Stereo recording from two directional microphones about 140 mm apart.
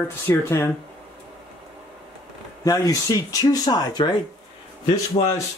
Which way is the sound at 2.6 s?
25° left (ahead or behind).